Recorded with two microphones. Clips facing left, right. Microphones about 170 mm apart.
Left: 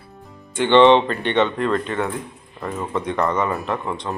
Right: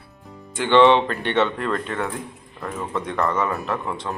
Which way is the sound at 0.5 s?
5° right (ahead or behind).